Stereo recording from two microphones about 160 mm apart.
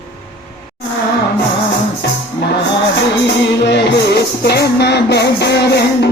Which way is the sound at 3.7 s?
90° left.